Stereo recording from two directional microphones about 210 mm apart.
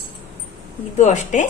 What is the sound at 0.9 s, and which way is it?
Speech, 35° left (ahead or behind).